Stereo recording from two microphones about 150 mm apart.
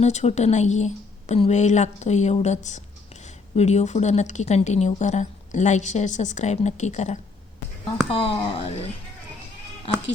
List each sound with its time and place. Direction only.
0.0 s speech: 50° left (ahead or behind)
8.1 s speech: 40° left (ahead or behind)